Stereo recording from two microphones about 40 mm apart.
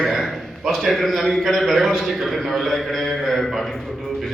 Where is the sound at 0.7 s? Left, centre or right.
Centre.